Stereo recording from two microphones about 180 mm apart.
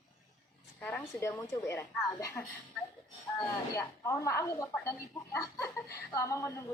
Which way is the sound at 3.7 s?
15° left (ahead or behind).